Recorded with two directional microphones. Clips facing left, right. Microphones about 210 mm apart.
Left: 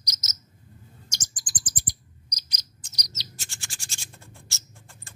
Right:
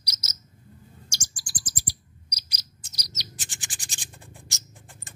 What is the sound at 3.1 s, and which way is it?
Bird, 15° right (ahead or behind).